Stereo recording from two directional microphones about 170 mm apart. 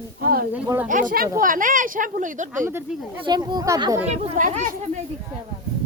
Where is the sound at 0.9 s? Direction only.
50° right (ahead or behind).